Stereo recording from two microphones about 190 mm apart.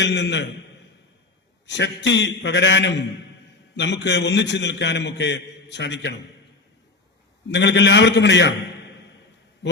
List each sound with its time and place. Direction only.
0.0 s a man's voice: 65° left (ahead or behind)
1.6 s a man's voice: 65° left (ahead or behind)
7.5 s a man's voice: 65° left (ahead or behind)